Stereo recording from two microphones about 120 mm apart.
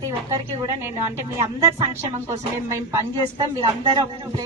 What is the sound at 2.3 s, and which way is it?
A woman's voice, 25° right (ahead or behind).